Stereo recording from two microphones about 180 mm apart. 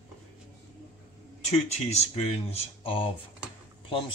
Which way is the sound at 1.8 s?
35° left (ahead or behind).